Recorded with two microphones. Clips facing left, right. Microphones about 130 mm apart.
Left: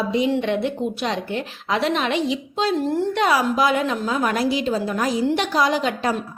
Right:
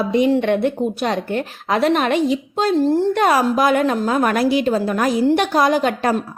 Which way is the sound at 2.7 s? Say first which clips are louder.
Right 7 dB; 30° right (ahead or behind).